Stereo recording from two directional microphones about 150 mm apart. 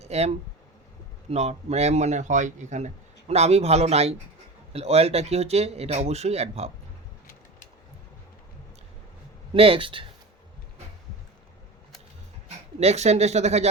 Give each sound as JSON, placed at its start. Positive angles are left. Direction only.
{"t": 0.0, "sound": "a man's voice", "side_deg": -45}
{"t": 9.6, "sound": "speech", "side_deg": -35}
{"t": 12.8, "sound": "a man's voice", "side_deg": -45}